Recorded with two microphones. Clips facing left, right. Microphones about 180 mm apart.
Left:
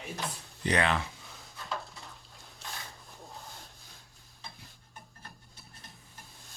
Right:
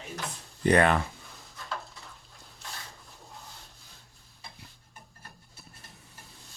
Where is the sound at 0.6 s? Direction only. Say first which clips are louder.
Right 6 dB; 50° right (ahead or behind).